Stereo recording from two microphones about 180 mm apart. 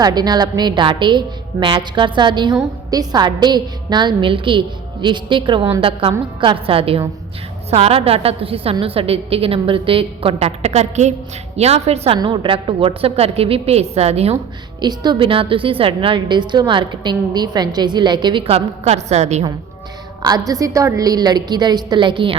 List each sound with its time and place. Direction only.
0.0 s a woman's voice: 25° right (ahead or behind)
14.8 s a woman's voice: 25° right (ahead or behind)
20.5 s a woman's voice: 20° right (ahead or behind)